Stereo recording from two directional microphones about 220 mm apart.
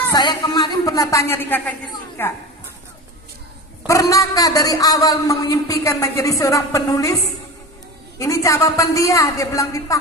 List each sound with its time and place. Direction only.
0.1 s a man's voice: 20° left (ahead or behind)
3.8 s a man's voice: 15° left (ahead or behind)
8.2 s a man's voice: 15° left (ahead or behind)